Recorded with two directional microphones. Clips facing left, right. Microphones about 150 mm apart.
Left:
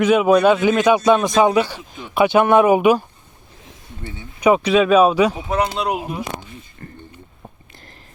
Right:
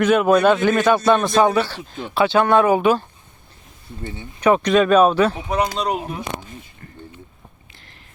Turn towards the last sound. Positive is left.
turn(degrees=10)  # may be behind; listen again after turning